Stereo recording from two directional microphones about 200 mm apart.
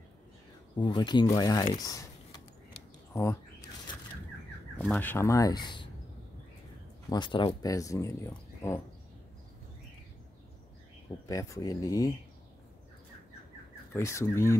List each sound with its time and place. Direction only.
0.7 s speech: 25° left (ahead or behind)
3.1 s a sound: 15° left (ahead or behind)
4.7 s speech: 10° left (ahead or behind)
7.1 s speech: 25° left (ahead or behind)
11.2 s speech: 15° left (ahead or behind)
13.9 s speech: 15° left (ahead or behind)